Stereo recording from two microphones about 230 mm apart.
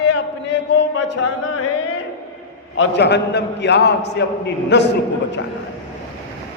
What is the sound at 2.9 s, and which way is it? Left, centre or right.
Speech, left.